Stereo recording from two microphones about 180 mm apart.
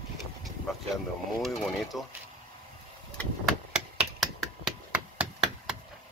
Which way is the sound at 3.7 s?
Centre (ahead or behind).